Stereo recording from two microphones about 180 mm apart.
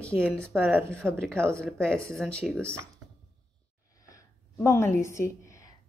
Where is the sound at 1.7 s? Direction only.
5° left (ahead or behind).